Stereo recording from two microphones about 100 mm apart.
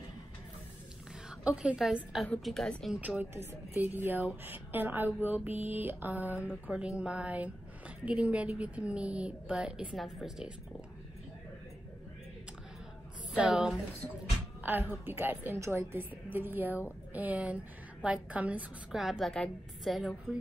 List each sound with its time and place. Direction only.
1.4 s a woman's voice: 10° right (ahead or behind)
2.4 s a woman's voice: 5° left (ahead or behind)
3.0 s a woman's voice: 15° right (ahead or behind)
13.3 s a woman's voice: 10° right (ahead or behind)
14.6 s a woman's voice: 20° right (ahead or behind)
18.9 s a woman's voice: centre (ahead or behind)